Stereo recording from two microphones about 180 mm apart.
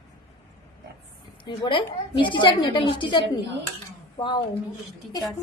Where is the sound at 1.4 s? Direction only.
30° left (ahead or behind).